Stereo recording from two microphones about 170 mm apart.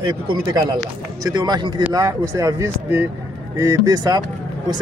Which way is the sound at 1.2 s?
25° right (ahead or behind).